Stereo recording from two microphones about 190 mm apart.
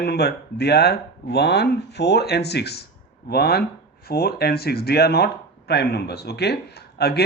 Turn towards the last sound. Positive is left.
turn(degrees=60)  # may be behind; listen again after turning